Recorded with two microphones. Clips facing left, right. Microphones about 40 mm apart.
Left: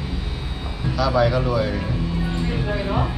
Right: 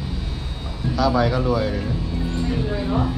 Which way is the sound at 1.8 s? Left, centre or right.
Left.